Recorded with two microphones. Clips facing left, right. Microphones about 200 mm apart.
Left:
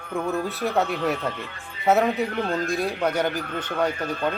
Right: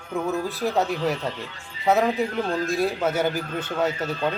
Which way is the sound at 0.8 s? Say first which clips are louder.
Even; 60° left (ahead or behind).